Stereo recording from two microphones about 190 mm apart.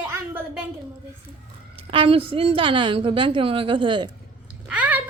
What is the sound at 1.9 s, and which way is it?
A woman's voice, 30° right (ahead or behind).